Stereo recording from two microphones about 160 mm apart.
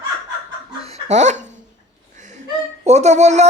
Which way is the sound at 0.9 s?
40° right (ahead or behind).